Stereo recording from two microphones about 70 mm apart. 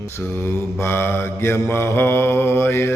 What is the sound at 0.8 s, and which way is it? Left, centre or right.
Mantra, left.